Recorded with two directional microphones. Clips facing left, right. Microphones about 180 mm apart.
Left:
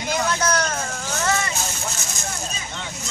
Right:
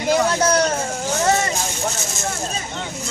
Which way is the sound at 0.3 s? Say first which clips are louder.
Right 5 dB; 30° right (ahead or behind).